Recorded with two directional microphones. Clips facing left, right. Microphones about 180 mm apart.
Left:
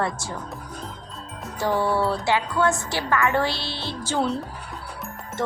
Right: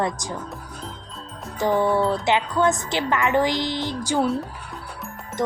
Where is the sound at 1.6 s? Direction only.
20° right (ahead or behind).